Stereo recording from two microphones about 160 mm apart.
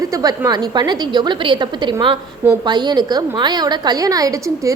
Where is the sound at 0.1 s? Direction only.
25° right (ahead or behind).